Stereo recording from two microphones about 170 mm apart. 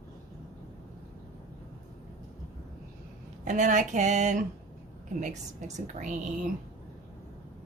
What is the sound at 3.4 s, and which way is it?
A woman's voice, 45° right (ahead or behind).